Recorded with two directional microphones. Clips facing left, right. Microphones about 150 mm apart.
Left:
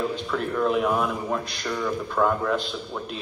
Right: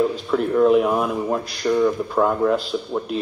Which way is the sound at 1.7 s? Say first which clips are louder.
Right 10 dB; 20° right (ahead or behind).